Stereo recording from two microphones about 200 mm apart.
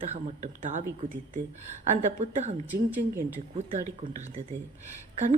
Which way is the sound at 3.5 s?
35° right (ahead or behind).